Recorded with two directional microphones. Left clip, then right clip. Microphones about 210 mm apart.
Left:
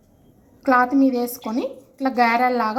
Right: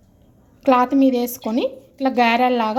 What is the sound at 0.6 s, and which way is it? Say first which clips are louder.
Speech: right 1 dB; 25° right (ahead or behind).